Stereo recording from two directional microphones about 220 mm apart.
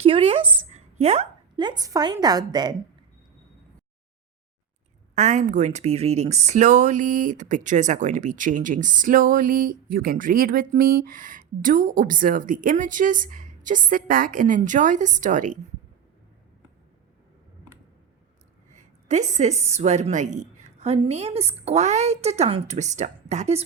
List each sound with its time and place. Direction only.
0.0 s a sound: 25° right (ahead or behind)
1.8 s a woman's voice: 15° right (ahead or behind)
5.1 s speech: 35° right (ahead or behind)
19.0 s a woman's voice: 35° right (ahead or behind)